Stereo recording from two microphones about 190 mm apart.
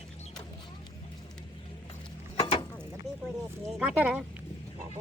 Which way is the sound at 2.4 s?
25° left (ahead or behind).